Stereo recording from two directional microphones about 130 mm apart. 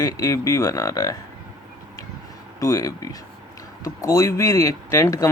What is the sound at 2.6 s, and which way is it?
Speech, 25° left (ahead or behind).